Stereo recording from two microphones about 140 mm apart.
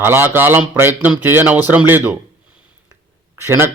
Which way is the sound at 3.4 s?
15° right (ahead or behind).